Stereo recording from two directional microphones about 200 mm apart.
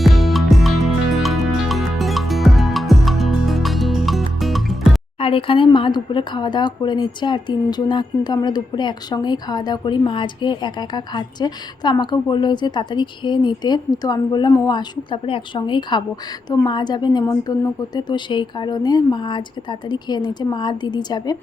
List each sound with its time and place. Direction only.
0.0 s music: centre (ahead or behind)
5.2 s speech: 25° left (ahead or behind)